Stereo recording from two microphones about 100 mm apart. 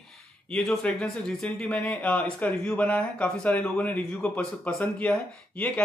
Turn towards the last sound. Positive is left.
turn(degrees=15)  # may be behind; listen again after turning